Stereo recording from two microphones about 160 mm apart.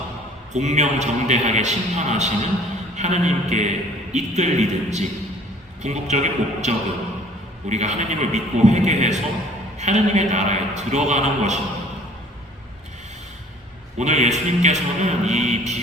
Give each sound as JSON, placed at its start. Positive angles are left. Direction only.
{"t": 0.5, "sound": "a man's voice", "side_deg": -45}
{"t": 14.0, "sound": "a man's voice", "side_deg": -45}